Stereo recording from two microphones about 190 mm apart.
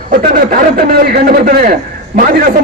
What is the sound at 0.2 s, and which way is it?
A man's voice, 50° right (ahead or behind).